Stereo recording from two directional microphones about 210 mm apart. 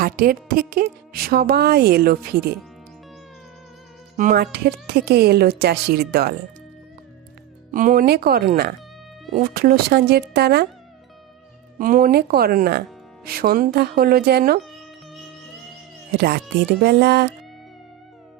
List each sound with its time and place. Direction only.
0.0 s speech: 45° right (ahead or behind)
4.2 s speech: 40° right (ahead or behind)
4.5 s speech: 50° right (ahead or behind)
7.7 s speech: 40° right (ahead or behind)
11.8 s speech: 40° right (ahead or behind)
16.1 s speech: 50° right (ahead or behind)